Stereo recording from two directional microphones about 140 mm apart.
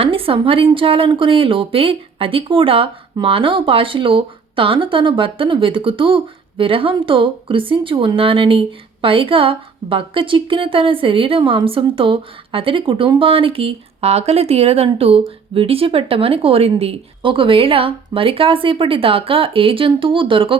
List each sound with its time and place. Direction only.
0.0 s speech: 40° right (ahead or behind)